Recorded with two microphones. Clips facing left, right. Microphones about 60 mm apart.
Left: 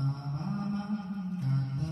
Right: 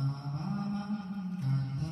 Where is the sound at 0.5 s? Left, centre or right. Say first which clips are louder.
Left 2 dB; left.